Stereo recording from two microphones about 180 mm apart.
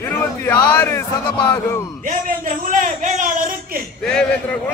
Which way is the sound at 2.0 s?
45° right (ahead or behind).